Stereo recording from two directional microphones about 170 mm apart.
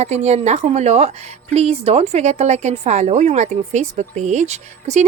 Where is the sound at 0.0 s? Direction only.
40° right (ahead or behind).